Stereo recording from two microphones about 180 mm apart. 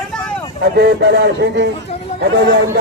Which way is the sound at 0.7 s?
65° right (ahead or behind).